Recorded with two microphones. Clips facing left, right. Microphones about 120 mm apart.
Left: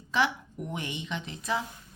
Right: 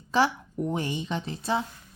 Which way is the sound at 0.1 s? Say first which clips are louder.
Right 4 dB; 35° right (ahead or behind).